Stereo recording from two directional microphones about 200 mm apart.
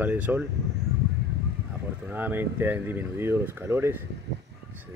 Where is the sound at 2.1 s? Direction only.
10° right (ahead or behind).